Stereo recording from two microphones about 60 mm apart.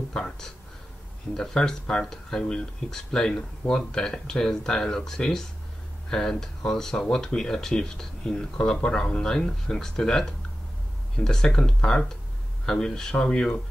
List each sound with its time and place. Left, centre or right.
0.1 s speech: centre